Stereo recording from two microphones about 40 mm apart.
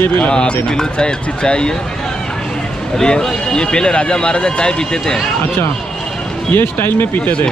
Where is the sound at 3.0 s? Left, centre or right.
Left.